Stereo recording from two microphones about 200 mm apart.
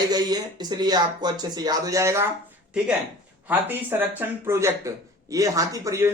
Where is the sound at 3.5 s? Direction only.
10° right (ahead or behind).